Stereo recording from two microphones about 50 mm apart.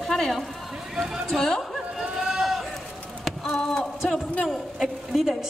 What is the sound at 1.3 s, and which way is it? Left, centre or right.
Speech, centre.